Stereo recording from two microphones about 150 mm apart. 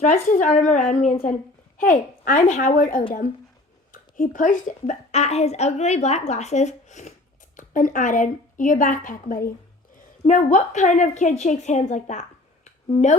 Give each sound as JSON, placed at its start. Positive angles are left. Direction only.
{"t": 0.0, "sound": "a woman's voice", "side_deg": 55}
{"t": 7.5, "sound": "a woman's voice", "side_deg": 65}
{"t": 10.2, "sound": "a woman's voice", "side_deg": 55}